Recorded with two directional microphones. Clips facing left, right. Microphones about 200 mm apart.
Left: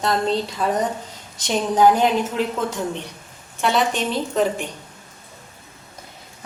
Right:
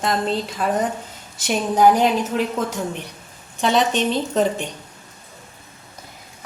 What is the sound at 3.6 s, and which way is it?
Speech, 20° right (ahead or behind).